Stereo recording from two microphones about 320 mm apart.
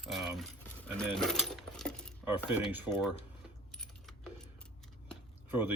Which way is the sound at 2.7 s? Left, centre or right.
Centre.